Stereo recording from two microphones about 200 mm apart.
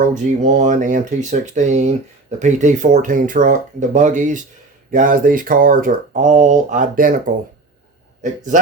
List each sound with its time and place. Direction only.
0.0 s speech: 40° right (ahead or behind)